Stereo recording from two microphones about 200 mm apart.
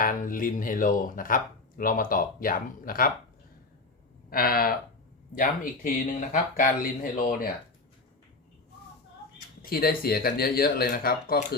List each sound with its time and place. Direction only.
0.0 s speech: 45° left (ahead or behind)
4.3 s speech: 45° left (ahead or behind)
9.6 s speech: 50° left (ahead or behind)